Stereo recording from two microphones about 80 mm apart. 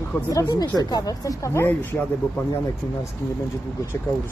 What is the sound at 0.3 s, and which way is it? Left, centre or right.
Speech, left.